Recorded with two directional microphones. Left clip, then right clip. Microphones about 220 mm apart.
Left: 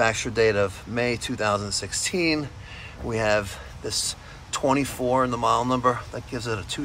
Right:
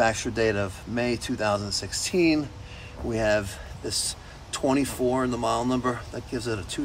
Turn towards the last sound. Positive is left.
turn(degrees=-10)  # may be behind; listen again after turning